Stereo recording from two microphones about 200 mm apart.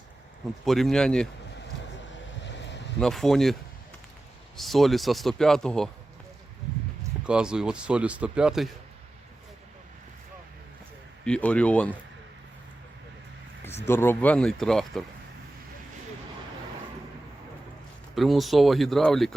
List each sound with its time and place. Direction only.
0.6 s speech: centre (ahead or behind)
2.4 s a sound: 60° left (ahead or behind)
3.0 s speech: centre (ahead or behind)
4.5 s speech: centre (ahead or behind)
7.3 s speech: 5° right (ahead or behind)
11.3 s speech: 5° left (ahead or behind)
13.8 s speech: 10° left (ahead or behind)
18.1 s speech: centre (ahead or behind)